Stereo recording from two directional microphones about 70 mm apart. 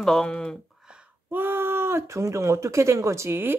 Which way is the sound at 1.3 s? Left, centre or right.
Right.